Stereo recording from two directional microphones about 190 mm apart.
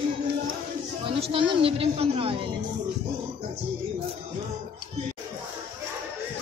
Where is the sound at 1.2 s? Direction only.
25° right (ahead or behind).